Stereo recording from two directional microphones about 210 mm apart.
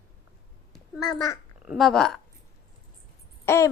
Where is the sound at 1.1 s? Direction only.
15° left (ahead or behind).